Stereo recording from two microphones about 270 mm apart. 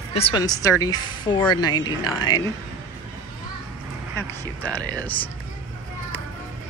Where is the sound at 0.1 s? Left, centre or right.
Centre.